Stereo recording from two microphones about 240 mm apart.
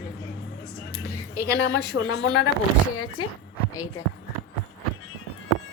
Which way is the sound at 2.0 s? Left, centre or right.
Left.